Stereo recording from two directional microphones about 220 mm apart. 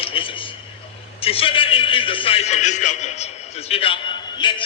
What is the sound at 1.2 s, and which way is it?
A man's voice, 25° left (ahead or behind).